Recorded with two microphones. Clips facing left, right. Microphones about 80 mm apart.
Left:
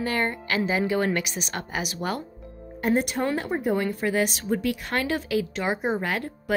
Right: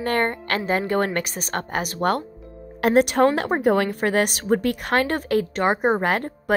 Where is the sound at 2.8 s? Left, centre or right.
Right.